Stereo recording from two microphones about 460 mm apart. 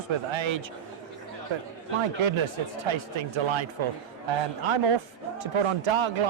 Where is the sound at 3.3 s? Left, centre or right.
Right.